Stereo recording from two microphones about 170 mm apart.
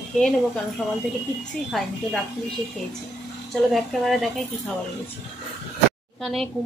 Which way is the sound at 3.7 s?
Centre (ahead or behind).